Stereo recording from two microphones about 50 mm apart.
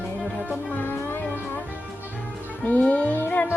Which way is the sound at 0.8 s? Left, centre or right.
Left.